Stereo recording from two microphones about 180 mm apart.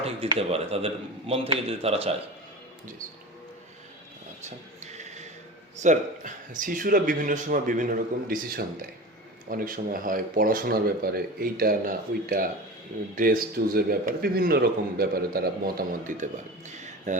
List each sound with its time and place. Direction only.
0.0 s speech: 35° right (ahead or behind)
4.4 s a sound: 40° right (ahead or behind)
5.8 s a man's voice: 45° right (ahead or behind)